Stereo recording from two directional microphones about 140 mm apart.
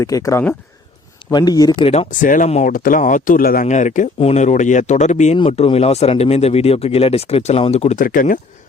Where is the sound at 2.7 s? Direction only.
80° left; by 4.1 s 60° left (ahead or behind).